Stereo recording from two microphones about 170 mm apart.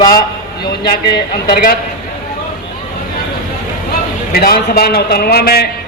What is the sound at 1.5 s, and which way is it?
Speech, 60° left (ahead or behind).